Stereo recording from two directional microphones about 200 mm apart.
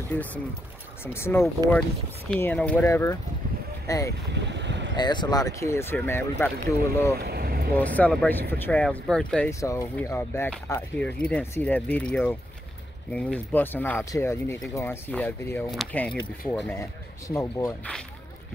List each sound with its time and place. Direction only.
0.1 s speech: 10° left (ahead or behind)
4.3 s boat: 60° right (ahead or behind)
4.9 s speech: 20° left (ahead or behind)
7.2 s vehicle: 50° right (ahead or behind)
7.7 s speech: 10° left (ahead or behind)